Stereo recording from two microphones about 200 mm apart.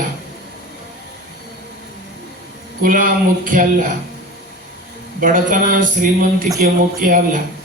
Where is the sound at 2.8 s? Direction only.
45° right (ahead or behind).